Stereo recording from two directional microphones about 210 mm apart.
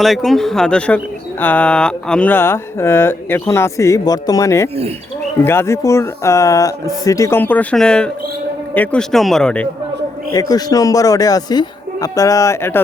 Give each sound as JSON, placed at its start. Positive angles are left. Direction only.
{"t": 0.0, "sound": "speech", "side_deg": 0}
{"t": 10.3, "sound": "speech", "side_deg": 15}